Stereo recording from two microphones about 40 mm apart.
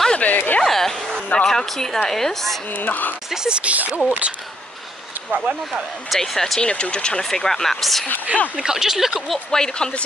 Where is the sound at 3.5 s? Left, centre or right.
Right.